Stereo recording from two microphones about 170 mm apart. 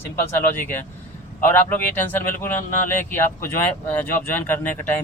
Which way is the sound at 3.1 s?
15° left (ahead or behind).